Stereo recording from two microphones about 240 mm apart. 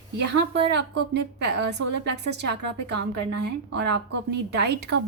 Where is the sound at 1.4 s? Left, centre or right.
Right.